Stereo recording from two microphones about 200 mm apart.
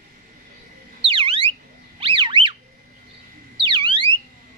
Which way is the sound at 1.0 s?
25° right (ahead or behind).